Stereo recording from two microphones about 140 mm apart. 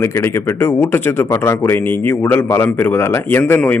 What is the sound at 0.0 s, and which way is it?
A man's voice, 20° left (ahead or behind).